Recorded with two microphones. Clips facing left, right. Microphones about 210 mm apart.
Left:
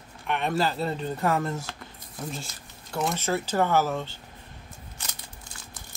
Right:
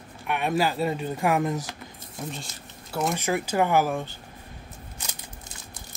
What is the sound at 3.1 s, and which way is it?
Speech, 15° right (ahead or behind).